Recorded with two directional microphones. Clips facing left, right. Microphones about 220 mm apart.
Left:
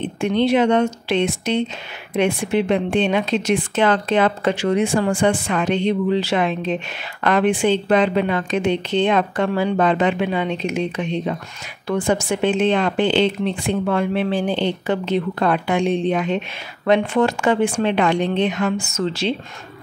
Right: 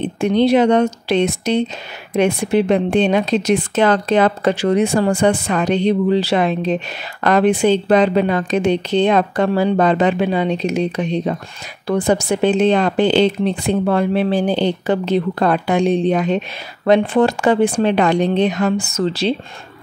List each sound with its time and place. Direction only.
0.0 s speech: 40° right (ahead or behind)